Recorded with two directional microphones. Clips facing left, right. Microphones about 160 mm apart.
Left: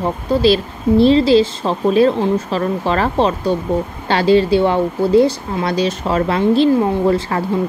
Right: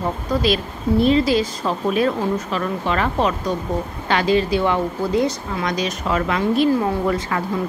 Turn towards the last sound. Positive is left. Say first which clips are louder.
# left 5 dB
turn(degrees=30)  # may be behind; listen again after turning